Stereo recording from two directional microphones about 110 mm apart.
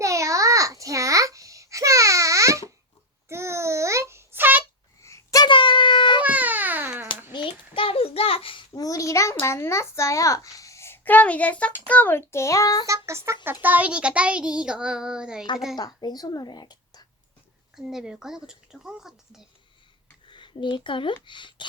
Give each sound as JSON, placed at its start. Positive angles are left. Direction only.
{"t": 0.0, "sound": "babbling", "side_deg": -30}
{"t": 3.2, "sound": "a sound", "side_deg": -25}
{"t": 5.0, "sound": "a sound", "side_deg": 30}
{"t": 5.5, "sound": "baby cry", "side_deg": 50}
{"t": 6.2, "sound": "baby cry", "side_deg": -15}
{"t": 7.3, "sound": "a sound", "side_deg": 55}
{"t": 8.7, "sound": "a sound", "side_deg": 30}
{"t": 11.9, "sound": "a child's voice", "side_deg": 15}
{"t": 12.8, "sound": "a child's voice", "side_deg": -25}
{"t": 15.7, "sound": "a woman's voice", "side_deg": 40}
{"t": 17.7, "sound": "speech", "side_deg": -5}
{"t": 20.2, "sound": "speech", "side_deg": 50}